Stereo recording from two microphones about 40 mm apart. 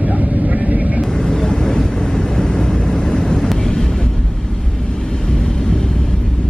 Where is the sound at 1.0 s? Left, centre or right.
Centre.